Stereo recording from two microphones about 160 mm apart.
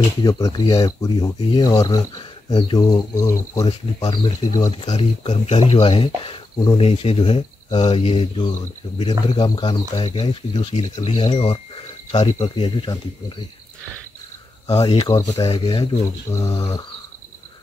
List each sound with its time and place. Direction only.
0.2 s speech: 20° left (ahead or behind)
3.6 s speech: 30° left (ahead or behind)
4.8 s speech: 45° left (ahead or behind)
10.7 s speech: 45° left (ahead or behind)
14.9 s speech: 30° left (ahead or behind)
15.1 s speech: 20° left (ahead or behind)